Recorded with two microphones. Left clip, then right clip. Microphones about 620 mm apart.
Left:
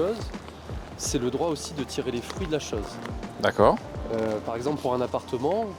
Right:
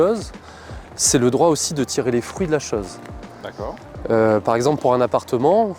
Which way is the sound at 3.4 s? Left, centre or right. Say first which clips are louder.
Left 11 dB; left.